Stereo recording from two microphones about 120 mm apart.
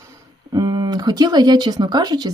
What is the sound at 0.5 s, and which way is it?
Speech, 35° right (ahead or behind).